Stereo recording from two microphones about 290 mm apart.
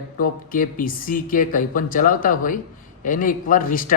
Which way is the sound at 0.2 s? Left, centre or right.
Left.